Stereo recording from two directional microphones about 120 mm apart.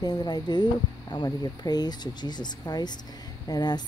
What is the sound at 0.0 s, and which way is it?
Speech, 35° left (ahead or behind).